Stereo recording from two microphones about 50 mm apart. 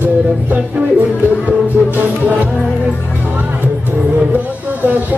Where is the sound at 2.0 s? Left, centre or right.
Right.